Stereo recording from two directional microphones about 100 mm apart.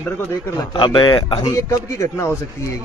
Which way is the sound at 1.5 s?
30° left (ahead or behind).